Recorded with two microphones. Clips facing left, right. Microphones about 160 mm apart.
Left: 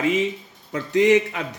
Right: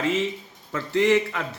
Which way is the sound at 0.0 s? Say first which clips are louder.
Left 3 dB; 15° left (ahead or behind).